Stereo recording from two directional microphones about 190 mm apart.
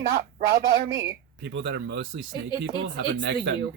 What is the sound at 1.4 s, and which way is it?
Speech, 60° right (ahead or behind).